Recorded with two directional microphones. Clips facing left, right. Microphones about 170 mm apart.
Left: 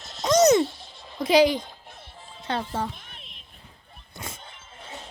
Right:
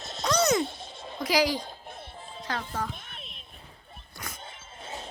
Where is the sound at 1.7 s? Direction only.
50° right (ahead or behind).